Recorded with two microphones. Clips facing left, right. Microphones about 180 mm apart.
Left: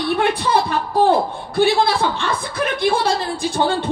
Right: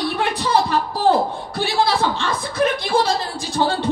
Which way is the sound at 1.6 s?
55° left (ahead or behind).